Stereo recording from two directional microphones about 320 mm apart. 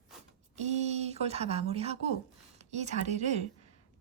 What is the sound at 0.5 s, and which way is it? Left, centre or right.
A woman's voice, right.